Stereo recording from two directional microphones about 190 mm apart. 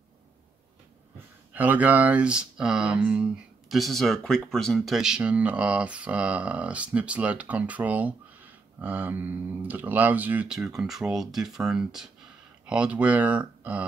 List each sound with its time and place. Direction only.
1.5 s speech: 10° right (ahead or behind)